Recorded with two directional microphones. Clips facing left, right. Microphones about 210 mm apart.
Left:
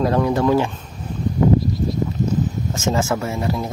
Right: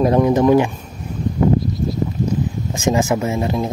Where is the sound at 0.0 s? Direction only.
20° right (ahead or behind).